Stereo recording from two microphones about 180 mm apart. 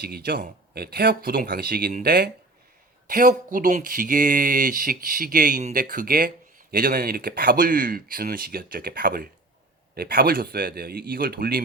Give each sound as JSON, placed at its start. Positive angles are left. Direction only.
{"t": 0.0, "sound": "speech", "side_deg": -55}